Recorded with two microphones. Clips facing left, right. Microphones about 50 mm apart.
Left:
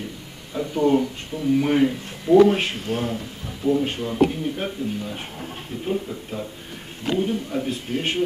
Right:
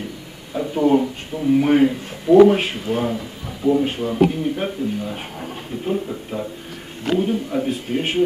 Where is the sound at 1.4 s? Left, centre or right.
Centre.